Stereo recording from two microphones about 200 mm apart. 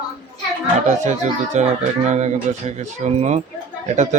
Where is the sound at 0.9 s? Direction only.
35° right (ahead or behind).